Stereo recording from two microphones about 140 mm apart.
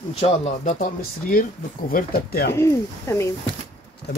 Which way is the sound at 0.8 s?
90° left.